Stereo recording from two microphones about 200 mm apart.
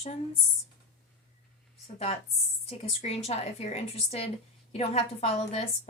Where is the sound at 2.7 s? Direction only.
30° left (ahead or behind).